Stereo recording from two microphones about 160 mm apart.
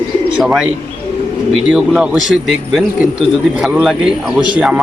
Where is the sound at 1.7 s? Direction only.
5° right (ahead or behind).